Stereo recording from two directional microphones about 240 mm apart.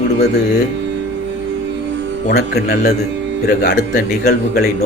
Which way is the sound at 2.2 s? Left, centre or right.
Left.